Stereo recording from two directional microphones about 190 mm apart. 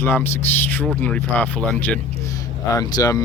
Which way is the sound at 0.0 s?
10° left (ahead or behind).